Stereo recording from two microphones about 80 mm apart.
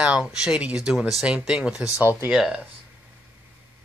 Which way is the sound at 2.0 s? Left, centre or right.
Right.